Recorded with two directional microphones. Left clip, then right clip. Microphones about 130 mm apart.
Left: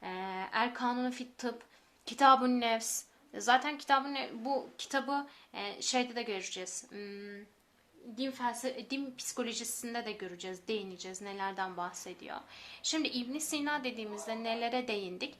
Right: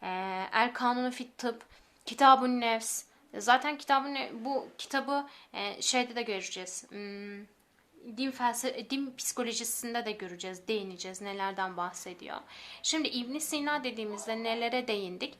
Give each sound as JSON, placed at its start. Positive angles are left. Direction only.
{"t": 0.0, "sound": "a sound", "side_deg": -20}
{"t": 2.0, "sound": "a woman's voice", "side_deg": -15}
{"t": 8.2, "sound": "a woman's voice", "side_deg": -35}